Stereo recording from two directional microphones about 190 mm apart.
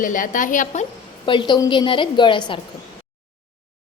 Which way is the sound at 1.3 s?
25° left (ahead or behind).